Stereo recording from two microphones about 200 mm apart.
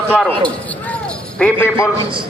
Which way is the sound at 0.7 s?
5° left (ahead or behind).